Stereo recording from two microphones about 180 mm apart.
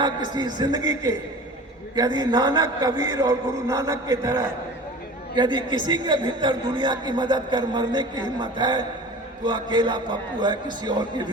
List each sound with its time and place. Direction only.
0.0 s a man's voice: 25° right (ahead or behind)